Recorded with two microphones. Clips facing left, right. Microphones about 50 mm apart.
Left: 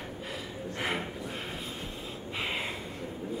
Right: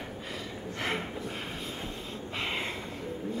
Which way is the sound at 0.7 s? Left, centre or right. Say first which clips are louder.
Even; centre.